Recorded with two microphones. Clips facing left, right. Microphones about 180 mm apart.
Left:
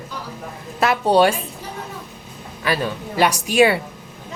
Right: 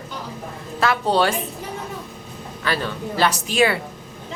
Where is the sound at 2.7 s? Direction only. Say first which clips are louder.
Left 2 dB; 15° left (ahead or behind).